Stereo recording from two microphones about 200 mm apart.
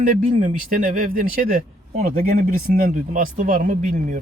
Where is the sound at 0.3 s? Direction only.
40° right (ahead or behind).